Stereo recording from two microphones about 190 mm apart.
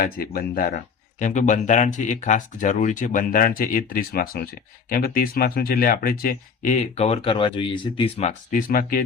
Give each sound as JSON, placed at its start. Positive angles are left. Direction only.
{"t": 0.0, "sound": "speech", "side_deg": 50}